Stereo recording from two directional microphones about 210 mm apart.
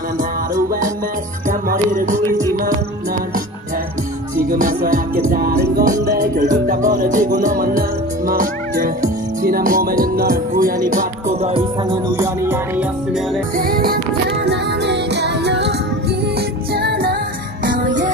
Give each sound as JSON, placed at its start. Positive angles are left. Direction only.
{"t": 0.2, "sound": "music", "side_deg": -40}
{"t": 4.4, "sound": "music", "side_deg": -40}
{"t": 8.3, "sound": "speech", "side_deg": -40}
{"t": 11.9, "sound": "music", "side_deg": -15}
{"t": 13.6, "sound": "music", "side_deg": -45}
{"t": 16.7, "sound": "music", "side_deg": -50}
{"t": 17.6, "sound": "music", "side_deg": -40}